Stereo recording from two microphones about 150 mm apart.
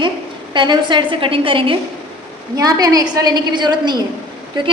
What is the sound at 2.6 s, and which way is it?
A woman's voice, 25° right (ahead or behind).